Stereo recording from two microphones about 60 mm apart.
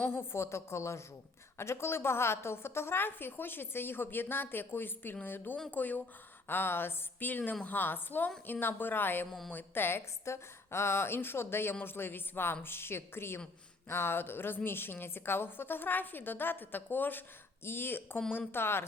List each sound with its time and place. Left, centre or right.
0.1 s a woman's voice: left